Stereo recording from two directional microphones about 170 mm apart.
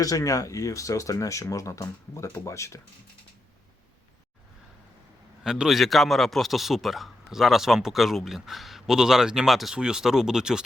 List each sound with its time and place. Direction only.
0.0 s speech: 20° left (ahead or behind)
5.4 s a man's voice: 5° right (ahead or behind)